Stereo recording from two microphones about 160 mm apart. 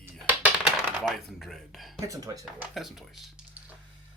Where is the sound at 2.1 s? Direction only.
20° right (ahead or behind).